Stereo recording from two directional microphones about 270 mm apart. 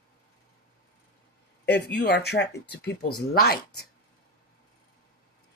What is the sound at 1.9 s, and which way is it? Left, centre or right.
Speech, left.